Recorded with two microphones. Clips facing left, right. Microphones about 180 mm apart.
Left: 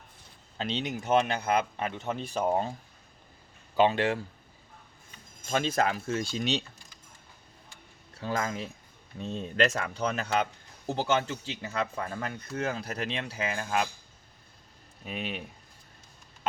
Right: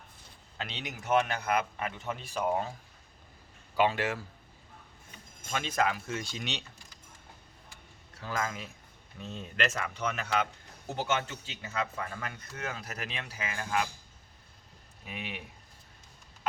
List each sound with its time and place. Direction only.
0.6 s speech: 30° left (ahead or behind)
3.8 s speech: 25° left (ahead or behind)
5.5 s speech: 35° left (ahead or behind)
8.2 s speech: 30° left (ahead or behind)
15.0 s speech: 30° left (ahead or behind)